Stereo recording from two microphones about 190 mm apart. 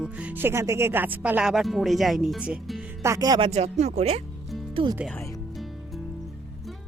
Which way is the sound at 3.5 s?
35° right (ahead or behind).